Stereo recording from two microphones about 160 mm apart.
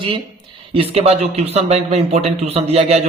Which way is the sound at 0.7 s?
35° right (ahead or behind).